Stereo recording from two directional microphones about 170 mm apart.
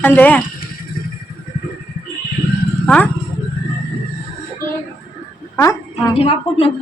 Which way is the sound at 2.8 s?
5° left (ahead or behind).